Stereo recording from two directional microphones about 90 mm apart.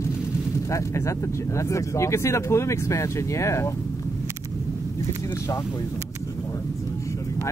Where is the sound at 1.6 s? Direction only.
35° left (ahead or behind).